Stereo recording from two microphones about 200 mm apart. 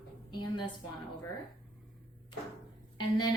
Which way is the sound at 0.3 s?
20° left (ahead or behind).